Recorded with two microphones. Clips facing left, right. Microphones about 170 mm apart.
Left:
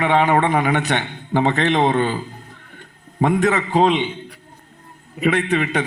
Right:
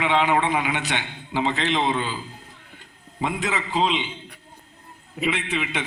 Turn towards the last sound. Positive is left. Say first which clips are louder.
# left 8 dB
turn(degrees=50)  # may be behind; listen again after turning